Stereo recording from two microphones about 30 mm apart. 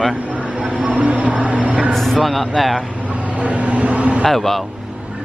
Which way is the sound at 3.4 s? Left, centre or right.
Right.